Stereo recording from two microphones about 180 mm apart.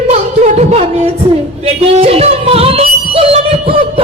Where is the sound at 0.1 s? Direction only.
35° right (ahead or behind).